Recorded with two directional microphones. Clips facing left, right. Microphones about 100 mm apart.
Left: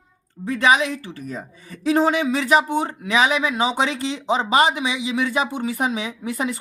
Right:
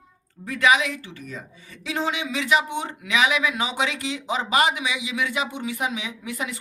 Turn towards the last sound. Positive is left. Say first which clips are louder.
# left 6 dB
turn(degrees=35)  # may be behind; listen again after turning